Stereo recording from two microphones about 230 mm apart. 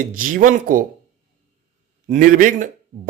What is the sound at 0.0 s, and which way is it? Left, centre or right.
Speech, right.